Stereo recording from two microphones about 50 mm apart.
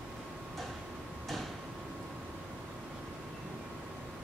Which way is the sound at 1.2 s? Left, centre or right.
Centre.